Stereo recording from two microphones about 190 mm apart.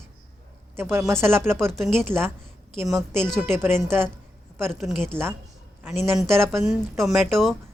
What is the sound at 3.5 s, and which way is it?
Speech, 10° right (ahead or behind).